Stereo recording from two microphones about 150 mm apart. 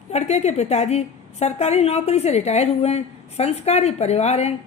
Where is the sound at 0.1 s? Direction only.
45° left (ahead or behind).